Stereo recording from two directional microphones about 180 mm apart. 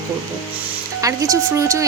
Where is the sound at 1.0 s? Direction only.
20° right (ahead or behind).